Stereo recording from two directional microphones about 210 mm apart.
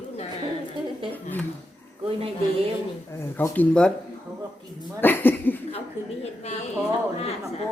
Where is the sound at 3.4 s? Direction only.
5° left (ahead or behind).